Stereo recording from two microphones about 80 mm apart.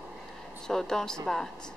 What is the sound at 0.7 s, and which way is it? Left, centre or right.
Speech, centre.